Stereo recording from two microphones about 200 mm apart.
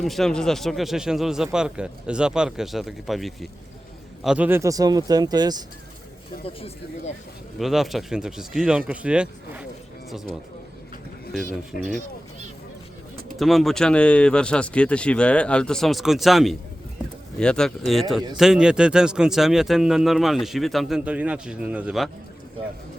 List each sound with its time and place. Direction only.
0.0 s speech: centre (ahead or behind); by 5.6 s 20° right (ahead or behind)
6.4 s speech: 30° left (ahead or behind)
7.6 s speech: centre (ahead or behind)
11.8 s speech: 35° right (ahead or behind)
13.3 s speech: centre (ahead or behind)